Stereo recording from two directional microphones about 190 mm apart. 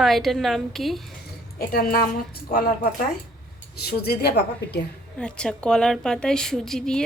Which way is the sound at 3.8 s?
55° left (ahead or behind).